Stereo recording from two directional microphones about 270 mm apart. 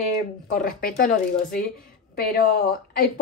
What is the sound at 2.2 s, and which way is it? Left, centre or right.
Speech, left.